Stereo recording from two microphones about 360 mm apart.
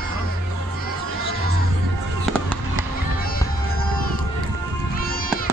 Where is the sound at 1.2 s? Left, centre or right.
Left.